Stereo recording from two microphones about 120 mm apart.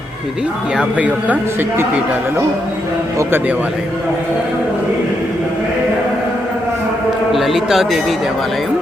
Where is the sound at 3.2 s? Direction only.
20° right (ahead or behind).